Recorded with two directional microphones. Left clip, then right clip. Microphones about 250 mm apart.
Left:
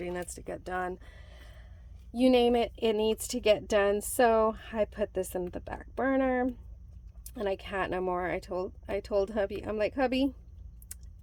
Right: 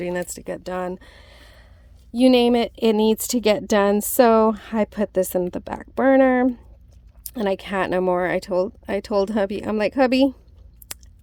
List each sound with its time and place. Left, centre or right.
0.0 s speech: right